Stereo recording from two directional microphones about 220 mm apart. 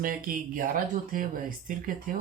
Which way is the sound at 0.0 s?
40° right (ahead or behind).